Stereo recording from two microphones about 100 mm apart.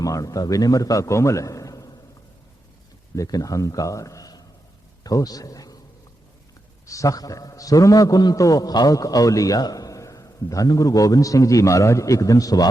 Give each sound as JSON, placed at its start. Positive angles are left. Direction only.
{"t": 0.0, "sound": "a man's voice", "side_deg": 35}
{"t": 3.2, "sound": "a man's voice", "side_deg": 35}
{"t": 6.8, "sound": "a man's voice", "side_deg": 30}